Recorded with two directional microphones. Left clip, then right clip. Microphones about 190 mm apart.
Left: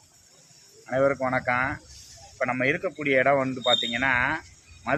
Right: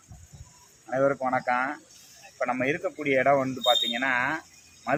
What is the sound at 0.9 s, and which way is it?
Speech, 10° left (ahead or behind).